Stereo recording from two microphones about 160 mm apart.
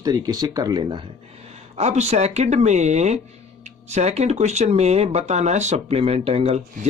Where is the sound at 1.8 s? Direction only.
45° right (ahead or behind).